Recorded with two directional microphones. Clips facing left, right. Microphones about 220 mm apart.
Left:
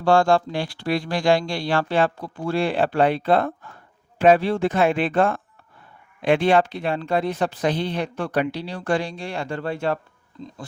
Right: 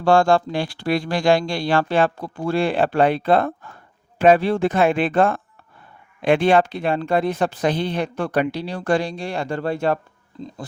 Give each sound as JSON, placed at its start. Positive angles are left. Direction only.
{"t": 0.0, "sound": "speech", "side_deg": -50}